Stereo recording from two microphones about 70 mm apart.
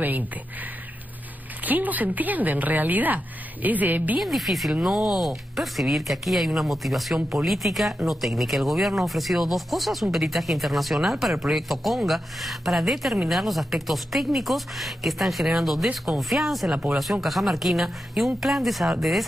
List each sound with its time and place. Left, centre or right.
1.6 s speech: right
4.2 s speech: centre